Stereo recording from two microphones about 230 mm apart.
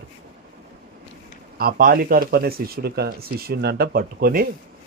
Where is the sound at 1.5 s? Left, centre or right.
Right.